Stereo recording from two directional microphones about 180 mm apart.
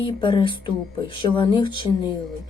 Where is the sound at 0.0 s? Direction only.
30° left (ahead or behind).